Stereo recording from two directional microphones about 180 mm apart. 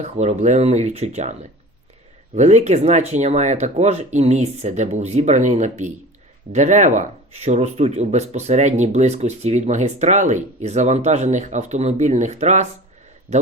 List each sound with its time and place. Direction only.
0.0 s speech: 40° right (ahead or behind)